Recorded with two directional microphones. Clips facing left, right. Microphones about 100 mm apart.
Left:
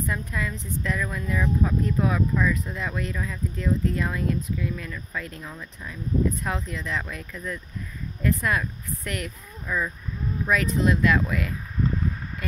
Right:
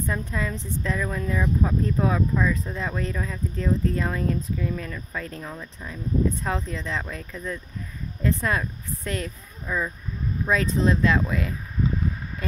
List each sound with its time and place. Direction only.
0.0 s speech: 30° right (ahead or behind)